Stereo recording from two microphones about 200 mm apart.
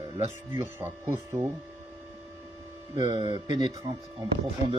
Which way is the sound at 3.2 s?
20° right (ahead or behind).